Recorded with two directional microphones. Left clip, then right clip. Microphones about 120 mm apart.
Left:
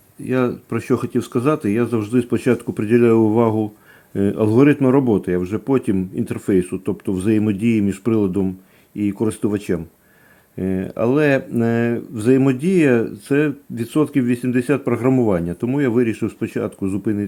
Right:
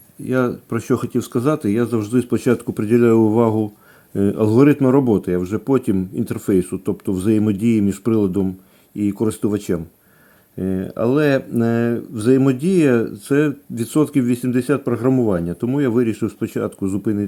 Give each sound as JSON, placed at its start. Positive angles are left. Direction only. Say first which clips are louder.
{"t": 0.3, "sound": "speech", "louder": "even", "side_deg": -25}